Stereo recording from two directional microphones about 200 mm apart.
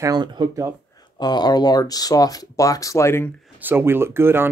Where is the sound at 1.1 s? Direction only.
20° left (ahead or behind).